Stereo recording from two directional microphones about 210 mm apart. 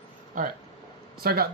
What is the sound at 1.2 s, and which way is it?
Speech, 45° right (ahead or behind).